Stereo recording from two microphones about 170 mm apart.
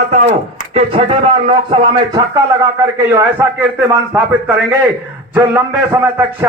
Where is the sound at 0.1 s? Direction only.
40° right (ahead or behind).